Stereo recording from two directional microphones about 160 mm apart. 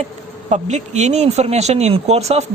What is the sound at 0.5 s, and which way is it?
A man's voice, 45° right (ahead or behind).